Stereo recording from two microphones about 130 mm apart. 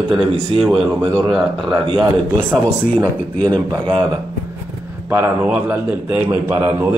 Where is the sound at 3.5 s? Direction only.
35° right (ahead or behind).